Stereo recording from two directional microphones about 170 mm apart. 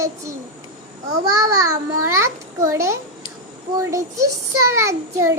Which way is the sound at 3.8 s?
20° right (ahead or behind).